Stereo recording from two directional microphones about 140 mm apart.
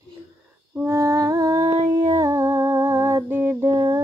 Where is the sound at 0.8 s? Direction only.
20° right (ahead or behind).